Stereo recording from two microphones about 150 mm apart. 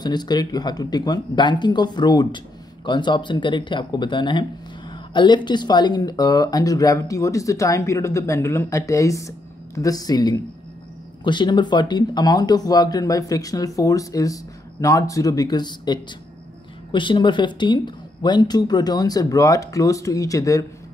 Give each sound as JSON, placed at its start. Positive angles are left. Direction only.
{"t": 0.0, "sound": "speech", "side_deg": 30}